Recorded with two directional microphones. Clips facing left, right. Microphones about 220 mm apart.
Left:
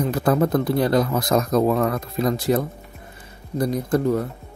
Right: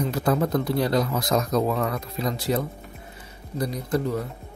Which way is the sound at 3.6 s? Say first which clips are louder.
Left 5 dB; 50° left (ahead or behind).